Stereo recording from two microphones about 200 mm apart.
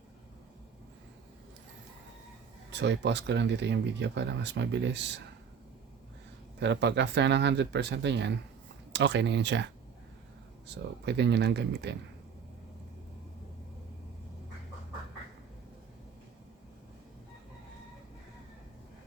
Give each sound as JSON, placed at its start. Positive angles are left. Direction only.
{"t": 2.6, "sound": "speech", "side_deg": -60}
{"t": 6.6, "sound": "speech", "side_deg": -60}
{"t": 10.7, "sound": "speech", "side_deg": -55}